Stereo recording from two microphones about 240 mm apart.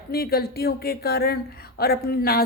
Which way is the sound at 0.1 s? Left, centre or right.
Left.